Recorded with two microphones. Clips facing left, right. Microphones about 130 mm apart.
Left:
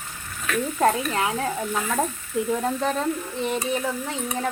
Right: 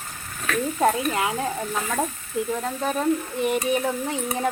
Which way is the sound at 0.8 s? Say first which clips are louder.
Even; 5° right (ahead or behind).